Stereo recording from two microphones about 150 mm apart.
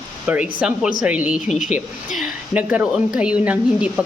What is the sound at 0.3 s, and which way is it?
A woman's voice, 10° right (ahead or behind).